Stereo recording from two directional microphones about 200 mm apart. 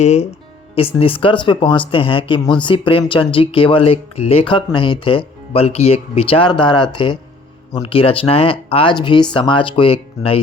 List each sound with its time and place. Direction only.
0.0 s speech: 35° left (ahead or behind)